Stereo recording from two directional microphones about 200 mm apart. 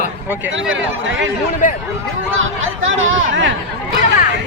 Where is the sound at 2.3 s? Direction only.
75° right (ahead or behind).